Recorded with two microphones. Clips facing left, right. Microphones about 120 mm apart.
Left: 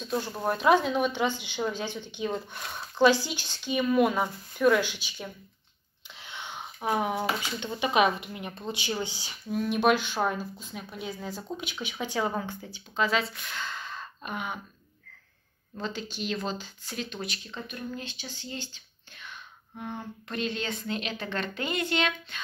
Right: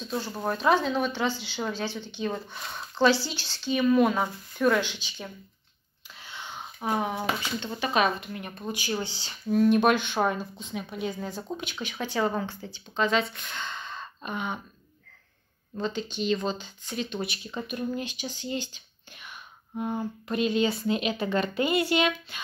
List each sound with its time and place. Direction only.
0.0 s speech: 10° left (ahead or behind)
9.6 s speech: centre (ahead or behind)
15.7 s speech: centre (ahead or behind)
17.6 s speech: 15° right (ahead or behind)